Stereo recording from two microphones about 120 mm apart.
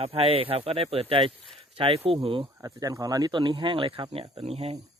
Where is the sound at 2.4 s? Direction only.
30° right (ahead or behind).